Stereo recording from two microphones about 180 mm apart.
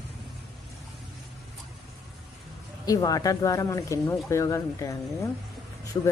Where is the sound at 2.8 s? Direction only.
20° left (ahead or behind).